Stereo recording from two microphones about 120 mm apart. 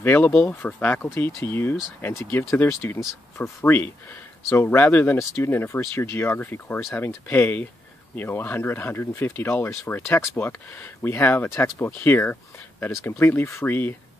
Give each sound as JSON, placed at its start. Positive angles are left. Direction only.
{"t": 0.0, "sound": "speech", "side_deg": 15}